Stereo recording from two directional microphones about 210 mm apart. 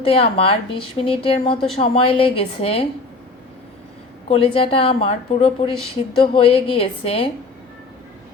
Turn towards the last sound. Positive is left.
turn(degrees=25)  # may be behind; listen again after turning